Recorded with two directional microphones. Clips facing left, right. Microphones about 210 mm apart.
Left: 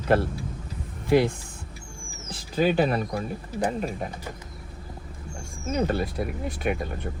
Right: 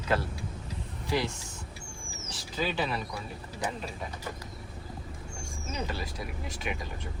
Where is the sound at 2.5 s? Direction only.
50° left (ahead or behind).